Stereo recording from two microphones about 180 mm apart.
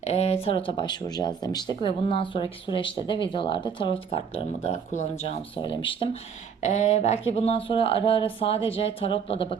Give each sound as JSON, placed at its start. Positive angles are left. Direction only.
{"t": 0.0, "sound": "speech", "side_deg": 35}
{"t": 6.6, "sound": "speech", "side_deg": 40}